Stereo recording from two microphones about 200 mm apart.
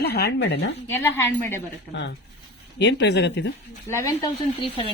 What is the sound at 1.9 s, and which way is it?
Speech, 60° left (ahead or behind).